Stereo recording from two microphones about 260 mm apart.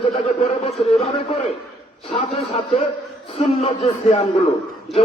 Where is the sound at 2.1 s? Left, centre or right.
Left.